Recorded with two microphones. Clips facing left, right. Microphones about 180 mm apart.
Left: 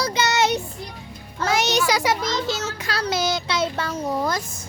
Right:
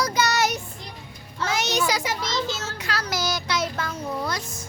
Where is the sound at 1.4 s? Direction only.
70° left (ahead or behind).